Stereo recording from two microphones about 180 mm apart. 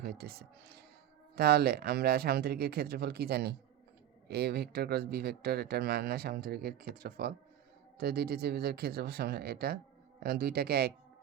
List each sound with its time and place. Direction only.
0.0 s speech: 60° right (ahead or behind)